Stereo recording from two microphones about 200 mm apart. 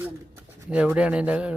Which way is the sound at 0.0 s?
10° right (ahead or behind).